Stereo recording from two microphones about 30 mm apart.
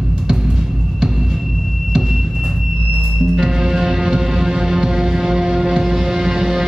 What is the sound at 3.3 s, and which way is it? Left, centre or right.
Music, centre.